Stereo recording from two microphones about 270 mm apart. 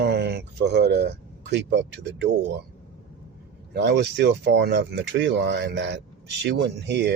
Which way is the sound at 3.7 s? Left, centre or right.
Right.